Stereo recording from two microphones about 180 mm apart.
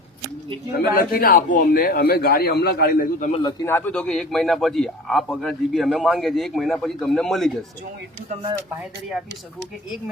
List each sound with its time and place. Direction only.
0.9 s a man's voice: 55° left (ahead or behind)
3.4 s a man's voice: 15° left (ahead or behind)
8.8 s a man's voice: centre (ahead or behind)